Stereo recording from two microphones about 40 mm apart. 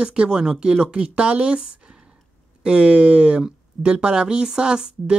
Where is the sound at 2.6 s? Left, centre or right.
Right.